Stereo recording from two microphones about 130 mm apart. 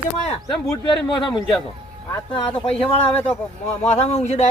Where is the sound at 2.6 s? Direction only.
45° left (ahead or behind).